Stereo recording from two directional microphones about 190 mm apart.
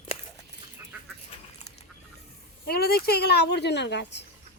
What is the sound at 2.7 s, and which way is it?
A woman's voice, 55° left (ahead or behind).